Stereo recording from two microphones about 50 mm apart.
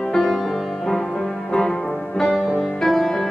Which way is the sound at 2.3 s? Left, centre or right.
Centre.